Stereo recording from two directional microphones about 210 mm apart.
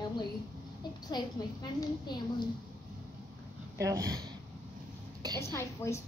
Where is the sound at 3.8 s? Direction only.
15° right (ahead or behind).